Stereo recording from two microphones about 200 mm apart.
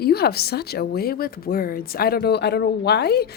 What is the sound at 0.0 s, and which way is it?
A woman's voice, 50° left (ahead or behind).